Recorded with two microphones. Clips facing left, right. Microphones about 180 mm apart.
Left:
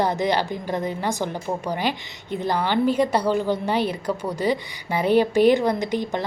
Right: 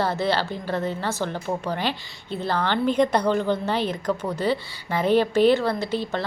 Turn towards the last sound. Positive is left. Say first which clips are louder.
# left 1 dB
turn(degrees=15)  # may be behind; listen again after turning